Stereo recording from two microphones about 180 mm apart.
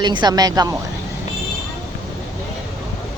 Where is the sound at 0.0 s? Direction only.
25° right (ahead or behind).